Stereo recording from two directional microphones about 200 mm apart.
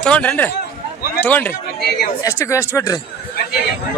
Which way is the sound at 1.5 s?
55° left (ahead or behind).